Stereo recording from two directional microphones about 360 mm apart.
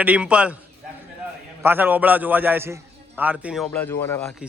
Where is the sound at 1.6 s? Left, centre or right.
Centre.